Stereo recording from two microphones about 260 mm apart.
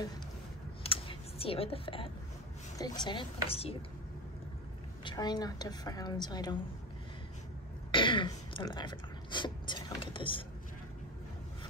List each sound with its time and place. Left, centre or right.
0.8 s a sound: left
2.8 s a woman's voice: centre
5.0 s a woman's voice: centre
7.9 s speech: centre